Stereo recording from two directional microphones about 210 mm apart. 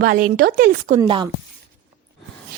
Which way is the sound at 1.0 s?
20° right (ahead or behind).